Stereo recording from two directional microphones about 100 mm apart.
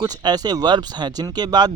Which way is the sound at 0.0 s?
40° right (ahead or behind).